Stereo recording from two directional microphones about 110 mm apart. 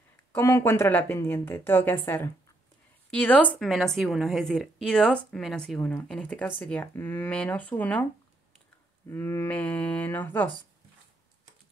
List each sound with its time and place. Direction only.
0.3 s a woman's voice: 25° left (ahead or behind)
3.5 s a woman's voice: centre (ahead or behind)
9.1 s a woman's voice: 20° left (ahead or behind)